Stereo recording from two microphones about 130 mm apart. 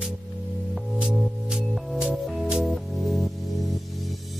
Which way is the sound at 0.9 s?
5° right (ahead or behind).